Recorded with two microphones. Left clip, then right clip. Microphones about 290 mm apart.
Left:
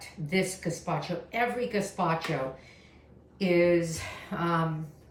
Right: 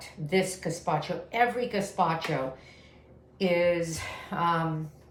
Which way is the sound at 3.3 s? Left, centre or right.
Centre.